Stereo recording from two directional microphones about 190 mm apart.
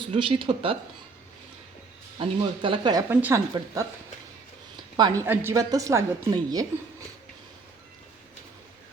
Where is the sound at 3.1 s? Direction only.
10° right (ahead or behind).